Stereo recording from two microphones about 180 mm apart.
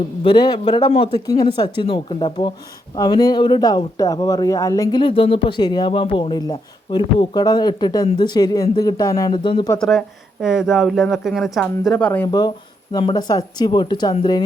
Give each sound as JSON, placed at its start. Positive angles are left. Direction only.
{"t": 0.3, "sound": "a man's voice", "side_deg": 25}
{"t": 10.4, "sound": "speech", "side_deg": -5}
{"t": 12.3, "sound": "a man's voice", "side_deg": 20}